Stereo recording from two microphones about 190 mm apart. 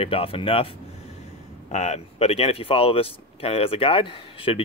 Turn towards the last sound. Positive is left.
turn(degrees=30)  # may be behind; listen again after turning